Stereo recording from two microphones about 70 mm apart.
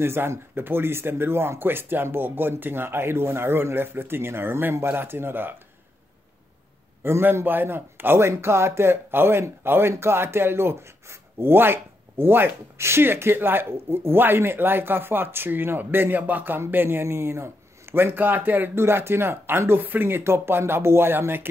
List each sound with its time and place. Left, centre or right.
0.0 s speech: right
7.0 s speech: right